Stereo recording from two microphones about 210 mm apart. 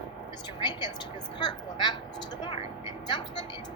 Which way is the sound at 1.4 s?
20° left (ahead or behind).